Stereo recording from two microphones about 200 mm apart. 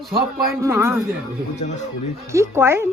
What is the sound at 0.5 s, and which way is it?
Speech, 15° right (ahead or behind).